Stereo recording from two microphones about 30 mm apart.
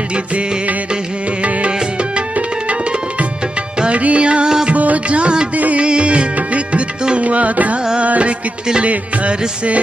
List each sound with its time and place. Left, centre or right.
2.3 s tabla: right
3.9 s music: right
4.7 s music: right
6.3 s music: right